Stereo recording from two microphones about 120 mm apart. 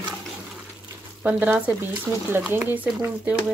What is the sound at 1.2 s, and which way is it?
Speech, 15° right (ahead or behind).